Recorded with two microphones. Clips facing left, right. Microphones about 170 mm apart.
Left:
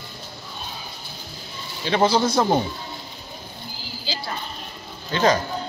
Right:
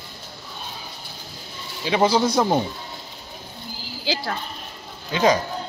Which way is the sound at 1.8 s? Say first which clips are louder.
Even; 10° right (ahead or behind).